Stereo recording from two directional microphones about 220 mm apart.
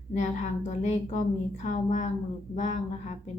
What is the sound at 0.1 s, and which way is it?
A woman's voice, 30° left (ahead or behind).